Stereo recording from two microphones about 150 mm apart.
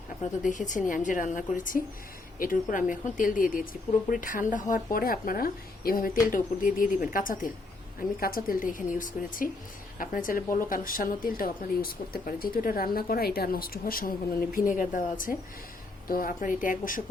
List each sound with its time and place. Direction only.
0.4 s a woman's voice: 55° left (ahead or behind); by 6.1 s 75° left (ahead or behind)
6.3 s a woman's voice: 65° left (ahead or behind)
8.2 s a woman's voice: 75° left (ahead or behind)
14.5 s a woman's voice: 65° left (ahead or behind)